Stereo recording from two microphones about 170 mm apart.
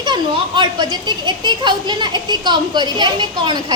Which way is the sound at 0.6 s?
25° right (ahead or behind).